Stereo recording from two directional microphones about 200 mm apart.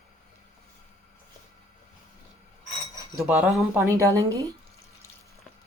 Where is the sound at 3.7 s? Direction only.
15° right (ahead or behind).